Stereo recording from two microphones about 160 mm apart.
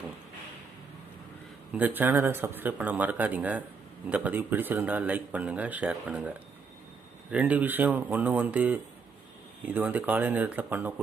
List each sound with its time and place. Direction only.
1.7 s speech: 10° right (ahead or behind)